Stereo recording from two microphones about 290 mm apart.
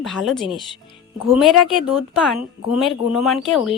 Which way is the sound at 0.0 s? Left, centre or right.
Centre.